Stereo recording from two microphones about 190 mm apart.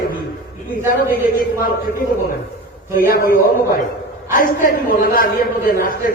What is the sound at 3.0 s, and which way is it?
A man's voice, 50° left (ahead or behind).